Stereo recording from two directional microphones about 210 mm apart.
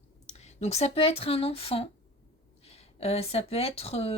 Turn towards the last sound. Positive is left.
turn(degrees=30)  # may be behind; listen again after turning